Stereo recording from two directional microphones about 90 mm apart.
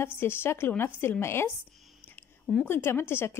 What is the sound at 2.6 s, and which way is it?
Speech, 25° left (ahead or behind).